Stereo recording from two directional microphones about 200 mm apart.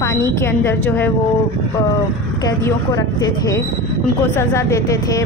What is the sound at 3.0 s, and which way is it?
Speech, 15° left (ahead or behind).